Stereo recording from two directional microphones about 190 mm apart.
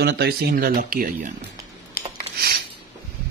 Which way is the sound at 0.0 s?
55° right (ahead or behind).